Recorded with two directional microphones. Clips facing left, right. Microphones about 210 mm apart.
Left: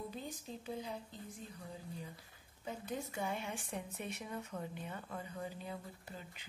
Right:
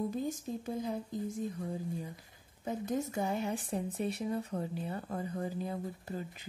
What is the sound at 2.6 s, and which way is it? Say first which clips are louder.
Speech: right 8 dB; 45° right (ahead or behind).